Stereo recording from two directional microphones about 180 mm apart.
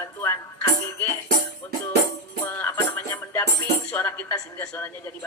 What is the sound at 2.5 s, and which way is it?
Music, 15° left (ahead or behind).